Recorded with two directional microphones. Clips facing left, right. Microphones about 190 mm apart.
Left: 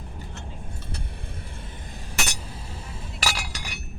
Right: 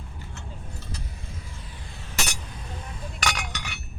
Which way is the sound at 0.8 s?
60° left (ahead or behind).